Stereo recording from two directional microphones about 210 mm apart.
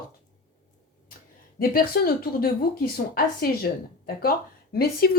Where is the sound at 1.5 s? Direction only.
45° left (ahead or behind).